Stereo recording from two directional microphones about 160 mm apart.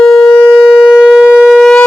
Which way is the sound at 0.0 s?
5° left (ahead or behind).